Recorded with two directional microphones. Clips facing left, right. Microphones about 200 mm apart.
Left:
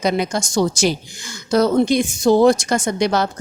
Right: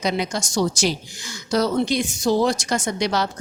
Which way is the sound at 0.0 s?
50° left (ahead or behind).